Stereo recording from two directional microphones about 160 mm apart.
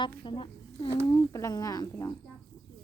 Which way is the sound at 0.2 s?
30° left (ahead or behind).